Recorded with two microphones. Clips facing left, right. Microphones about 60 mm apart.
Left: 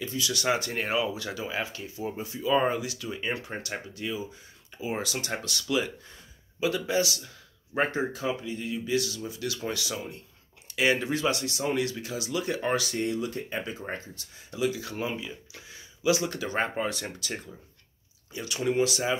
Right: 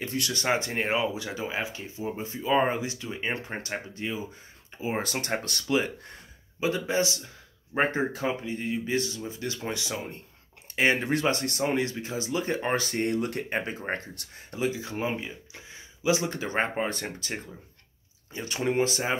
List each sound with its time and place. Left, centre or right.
0.0 s speech: right
0.3 s speech: right
8.1 s speech: right
14.6 s speech: right